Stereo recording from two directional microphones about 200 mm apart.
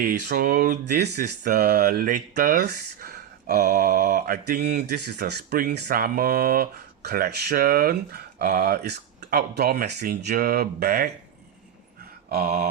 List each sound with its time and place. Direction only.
0.0 s speech: 50° right (ahead or behind)
0.9 s speech: 55° right (ahead or behind)
12.3 s speech: 50° right (ahead or behind)